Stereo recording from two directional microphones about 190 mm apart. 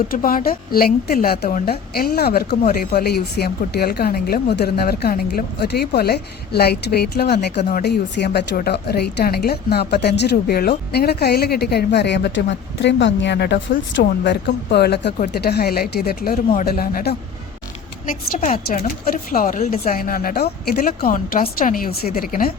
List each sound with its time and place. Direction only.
0.1 s a woman's voice: 50° left (ahead or behind)
18.5 s speech: 50° left (ahead or behind)